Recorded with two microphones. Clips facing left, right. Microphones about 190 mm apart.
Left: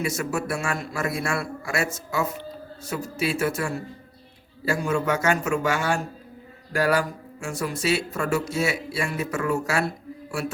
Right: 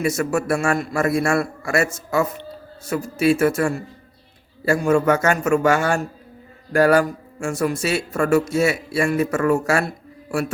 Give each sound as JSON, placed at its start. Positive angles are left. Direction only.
{"t": 0.0, "sound": "speech", "side_deg": -50}